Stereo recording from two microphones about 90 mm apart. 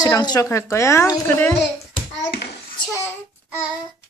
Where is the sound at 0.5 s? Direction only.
35° left (ahead or behind).